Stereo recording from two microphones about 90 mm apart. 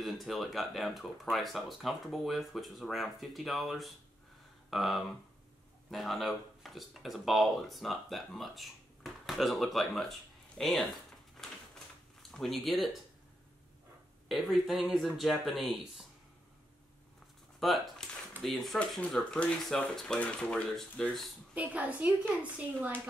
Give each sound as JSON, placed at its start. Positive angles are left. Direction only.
{"t": 0.0, "sound": "speech", "side_deg": 0}
{"t": 12.2, "sound": "speech", "side_deg": 5}
{"t": 14.3, "sound": "speech", "side_deg": 0}
{"t": 17.6, "sound": "speech", "side_deg": 0}
{"t": 21.5, "sound": "a woman's voice", "side_deg": -15}